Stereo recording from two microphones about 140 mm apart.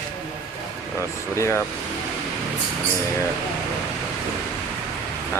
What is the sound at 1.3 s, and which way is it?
Speech, 20° left (ahead or behind).